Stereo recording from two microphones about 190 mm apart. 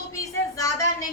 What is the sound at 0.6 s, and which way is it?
Speech, 15° left (ahead or behind).